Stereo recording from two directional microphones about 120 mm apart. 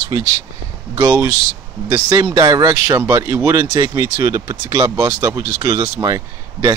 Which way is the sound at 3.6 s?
35° right (ahead or behind).